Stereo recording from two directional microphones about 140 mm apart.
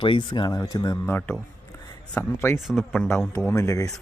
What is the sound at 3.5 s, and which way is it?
Speech, 20° left (ahead or behind).